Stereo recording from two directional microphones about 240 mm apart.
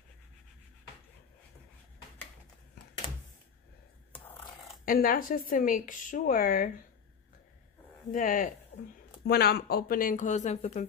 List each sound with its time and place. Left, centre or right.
4.8 s speech: left
8.1 s speech: left